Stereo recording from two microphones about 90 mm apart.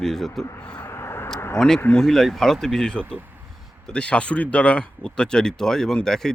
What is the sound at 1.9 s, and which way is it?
Speech, 5° left (ahead or behind).